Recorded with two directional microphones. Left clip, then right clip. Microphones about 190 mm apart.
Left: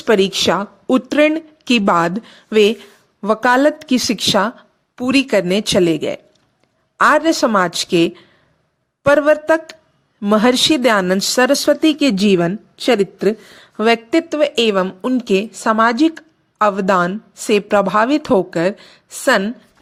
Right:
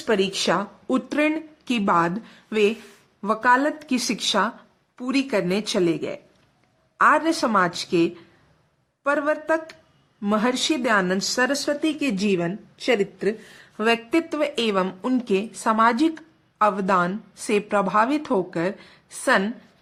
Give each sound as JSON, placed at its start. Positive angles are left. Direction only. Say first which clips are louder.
{"t": 0.0, "sound": "speech", "louder": "left 8 dB", "side_deg": 40}
{"t": 14.8, "sound": "speech", "louder": "left 6 dB", "side_deg": 20}
{"t": 15.2, "sound": "speech", "louder": "left 8 dB", "side_deg": 35}